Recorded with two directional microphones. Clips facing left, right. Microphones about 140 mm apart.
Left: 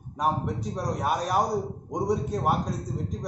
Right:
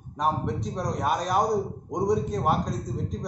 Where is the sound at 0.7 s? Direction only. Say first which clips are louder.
Even; 5° left (ahead or behind).